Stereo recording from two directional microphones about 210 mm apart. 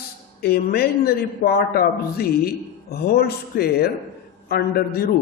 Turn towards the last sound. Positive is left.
turn(degrees=45)  # may be behind; listen again after turning